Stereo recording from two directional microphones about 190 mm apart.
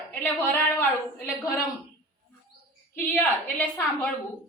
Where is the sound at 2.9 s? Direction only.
10° left (ahead or behind).